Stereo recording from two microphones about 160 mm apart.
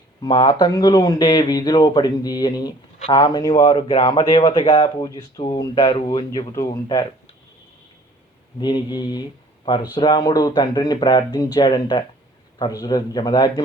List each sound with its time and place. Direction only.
0.2 s speech: 30° left (ahead or behind)
8.5 s speech: 30° left (ahead or behind)